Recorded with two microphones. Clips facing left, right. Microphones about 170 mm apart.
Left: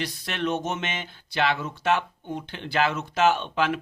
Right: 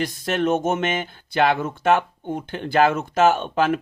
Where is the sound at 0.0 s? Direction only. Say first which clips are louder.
Right 7 dB; 45° right (ahead or behind).